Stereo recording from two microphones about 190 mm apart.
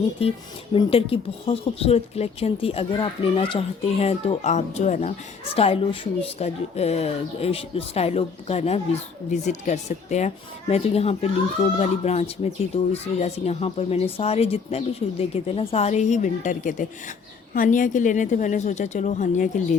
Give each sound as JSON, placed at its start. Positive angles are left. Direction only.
{"t": 0.2, "sound": "speech", "side_deg": 30}